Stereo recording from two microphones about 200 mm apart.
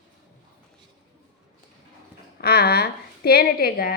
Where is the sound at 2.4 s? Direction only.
50° left (ahead or behind).